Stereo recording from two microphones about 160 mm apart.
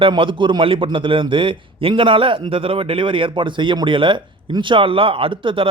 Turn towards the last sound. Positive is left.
turn(degrees=-35)  # may be behind; listen again after turning